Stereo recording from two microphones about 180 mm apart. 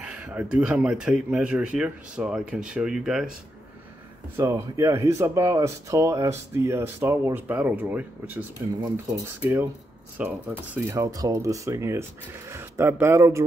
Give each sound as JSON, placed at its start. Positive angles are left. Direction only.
{"t": 0.0, "sound": "speech", "side_deg": -5}
{"t": 4.4, "sound": "speech", "side_deg": -20}